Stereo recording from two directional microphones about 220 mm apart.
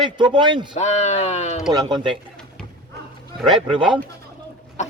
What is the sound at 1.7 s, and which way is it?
Speech, 20° right (ahead or behind).